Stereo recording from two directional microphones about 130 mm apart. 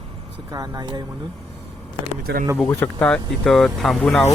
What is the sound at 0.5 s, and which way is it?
Speech, 30° right (ahead or behind).